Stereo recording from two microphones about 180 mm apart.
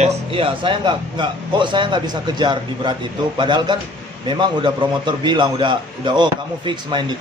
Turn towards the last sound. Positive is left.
turn(degrees=-25)  # may be behind; listen again after turning